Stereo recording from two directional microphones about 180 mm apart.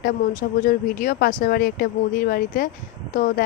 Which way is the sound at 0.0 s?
50° left (ahead or behind).